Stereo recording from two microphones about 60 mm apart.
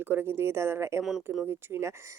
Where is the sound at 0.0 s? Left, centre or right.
Right.